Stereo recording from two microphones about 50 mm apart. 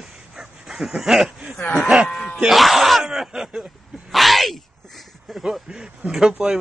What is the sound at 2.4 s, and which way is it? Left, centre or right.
Speech, centre.